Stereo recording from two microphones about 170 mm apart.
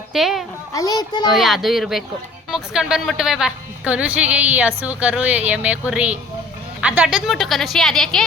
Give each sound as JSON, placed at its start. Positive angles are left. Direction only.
{"t": 0.1, "sound": "a woman's voice", "side_deg": 0}
{"t": 0.7, "sound": "speech", "side_deg": 20}
{"t": 1.4, "sound": "a woman's voice", "side_deg": 0}